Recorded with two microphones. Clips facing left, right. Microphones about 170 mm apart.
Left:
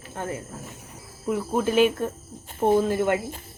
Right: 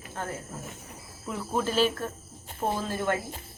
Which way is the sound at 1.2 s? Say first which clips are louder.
Left 5 dB; 10° left (ahead or behind).